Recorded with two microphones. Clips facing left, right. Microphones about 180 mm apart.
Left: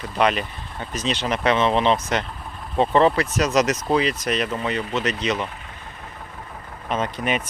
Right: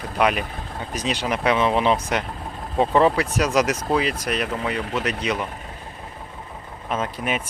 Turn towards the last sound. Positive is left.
turn(degrees=-5)  # may be behind; listen again after turning